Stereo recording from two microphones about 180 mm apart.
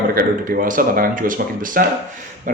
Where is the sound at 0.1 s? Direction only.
50° right (ahead or behind).